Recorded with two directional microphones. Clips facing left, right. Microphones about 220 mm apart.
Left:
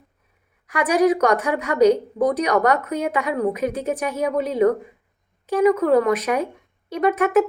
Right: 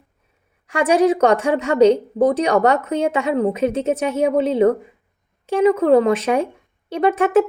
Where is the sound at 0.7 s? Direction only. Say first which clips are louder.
Right 2 dB; 25° right (ahead or behind).